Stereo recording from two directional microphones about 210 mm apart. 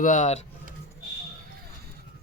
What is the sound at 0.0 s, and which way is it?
Speech, 35° left (ahead or behind).